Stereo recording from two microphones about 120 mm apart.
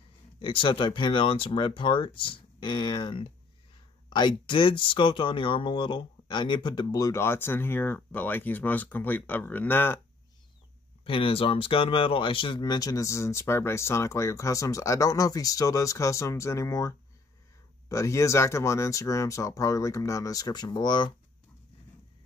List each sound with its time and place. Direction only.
0.4 s speech: 45° left (ahead or behind); by 9.9 s 15° left (ahead or behind)
11.1 s speech: 50° left (ahead or behind)